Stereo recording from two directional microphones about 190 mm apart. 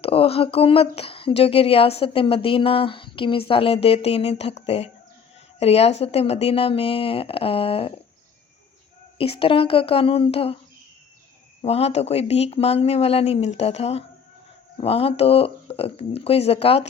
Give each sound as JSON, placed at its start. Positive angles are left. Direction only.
{"t": 0.0, "sound": "speech", "side_deg": 30}
{"t": 9.1, "sound": "speech", "side_deg": 30}
{"t": 11.6, "sound": "speech", "side_deg": 35}